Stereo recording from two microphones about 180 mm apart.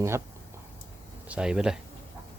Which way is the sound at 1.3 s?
5° right (ahead or behind).